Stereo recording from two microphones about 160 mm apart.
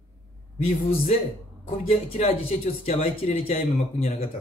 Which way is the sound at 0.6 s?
40° left (ahead or behind).